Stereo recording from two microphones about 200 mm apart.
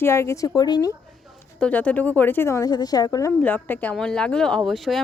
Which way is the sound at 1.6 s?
5° left (ahead or behind).